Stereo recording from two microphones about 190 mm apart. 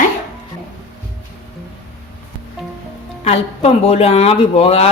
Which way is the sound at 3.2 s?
35° left (ahead or behind).